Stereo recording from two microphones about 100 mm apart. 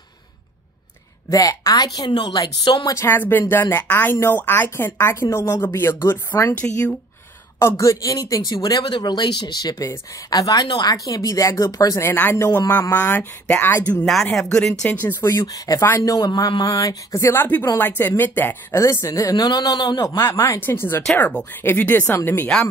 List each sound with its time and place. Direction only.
1.3 s speech: 35° left (ahead or behind)
2.0 s speech: 50° left (ahead or behind)
2.9 s a woman's voice: 25° left (ahead or behind)
7.5 s speech: 30° left (ahead or behind)
12.0 s a woman's voice: 20° left (ahead or behind)
14.0 s speech: 5° left (ahead or behind); by 15.4 s 25° left (ahead or behind)
15.4 s a woman's voice: 35° left (ahead or behind)
20.2 s a woman's voice: 25° left (ahead or behind)
21.2 s a woman's voice: 10° left (ahead or behind)